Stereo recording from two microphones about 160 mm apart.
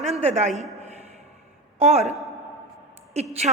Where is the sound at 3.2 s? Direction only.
40° right (ahead or behind).